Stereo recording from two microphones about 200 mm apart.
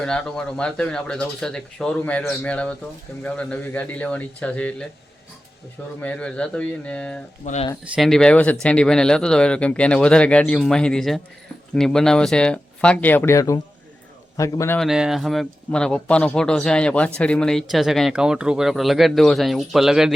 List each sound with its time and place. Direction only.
0.0 s speech: 5° left (ahead or behind)
6.0 s speech: 5° left (ahead or behind)
7.4 s speech: 35° left (ahead or behind)
7.9 s speech: centre (ahead or behind)
14.8 s speech: 5° right (ahead or behind)